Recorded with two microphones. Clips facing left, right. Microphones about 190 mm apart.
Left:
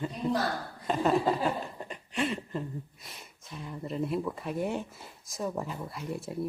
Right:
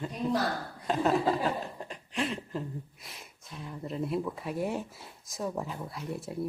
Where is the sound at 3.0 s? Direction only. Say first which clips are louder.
Even; centre (ahead or behind).